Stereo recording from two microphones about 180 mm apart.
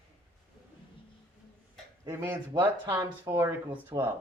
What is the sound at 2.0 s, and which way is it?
Speech, 15° right (ahead or behind).